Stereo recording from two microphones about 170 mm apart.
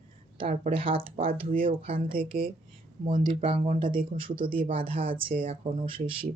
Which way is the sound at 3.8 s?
55° right (ahead or behind).